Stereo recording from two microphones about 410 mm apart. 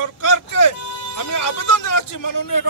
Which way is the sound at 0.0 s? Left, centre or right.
Left.